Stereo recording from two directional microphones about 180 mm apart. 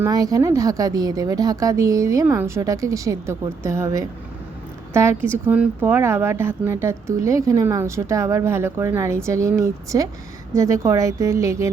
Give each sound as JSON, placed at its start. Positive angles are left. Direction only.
{"t": 0.0, "sound": "a woman's voice", "side_deg": -20}